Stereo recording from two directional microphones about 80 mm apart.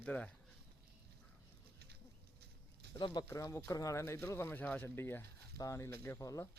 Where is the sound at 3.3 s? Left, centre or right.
Left.